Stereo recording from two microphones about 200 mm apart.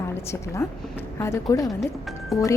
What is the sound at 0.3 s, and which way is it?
A woman's voice, 15° left (ahead or behind).